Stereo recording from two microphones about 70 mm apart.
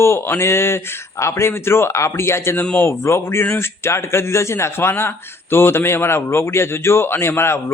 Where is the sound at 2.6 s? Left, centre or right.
Left.